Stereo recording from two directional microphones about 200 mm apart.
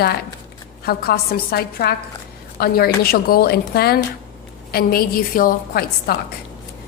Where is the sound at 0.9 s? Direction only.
50° left (ahead or behind).